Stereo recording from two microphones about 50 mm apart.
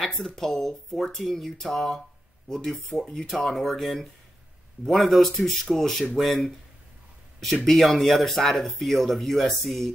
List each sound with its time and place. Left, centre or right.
0.0 s speech: centre
7.6 s speech: centre